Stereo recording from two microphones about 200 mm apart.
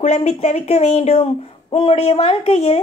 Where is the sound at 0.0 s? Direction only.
30° left (ahead or behind).